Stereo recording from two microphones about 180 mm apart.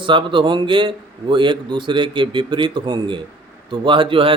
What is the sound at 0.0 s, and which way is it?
Speech, 25° right (ahead or behind).